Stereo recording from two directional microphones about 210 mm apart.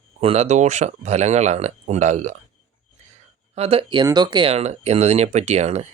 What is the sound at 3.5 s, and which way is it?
Speech, 30° right (ahead or behind).